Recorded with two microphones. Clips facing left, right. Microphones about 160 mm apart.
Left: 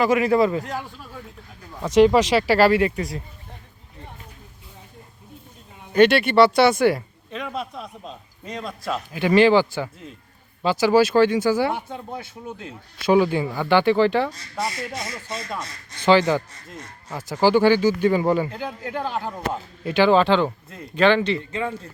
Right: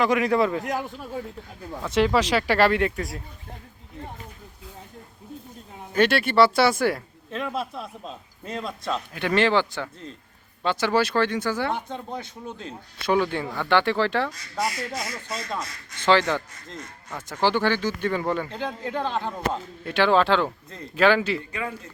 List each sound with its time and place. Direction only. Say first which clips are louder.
0.0 s speech: left 3 dB; 5° left (ahead or behind)
0.6 s speech: right 3 dB; 15° right (ahead or behind)
2.0 s speech: left 6 dB; 15° left (ahead or behind)
2.3 s speech: left 4 dB; 5° left (ahead or behind)
5.9 s speech: left 5 dB; centre (ahead or behind)
21.5 s speech: left 5 dB; 30° left (ahead or behind)